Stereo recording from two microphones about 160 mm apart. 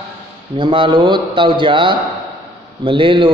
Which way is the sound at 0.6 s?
30° right (ahead or behind).